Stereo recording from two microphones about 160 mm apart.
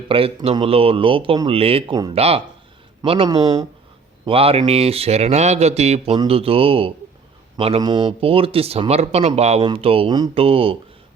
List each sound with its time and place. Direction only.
0.1 s speech: 35° right (ahead or behind)
1.9 s speech: 25° right (ahead or behind)
2.1 s speech: 40° right (ahead or behind)
3.2 s speech: 25° right (ahead or behind)
4.3 s speech: 35° right (ahead or behind)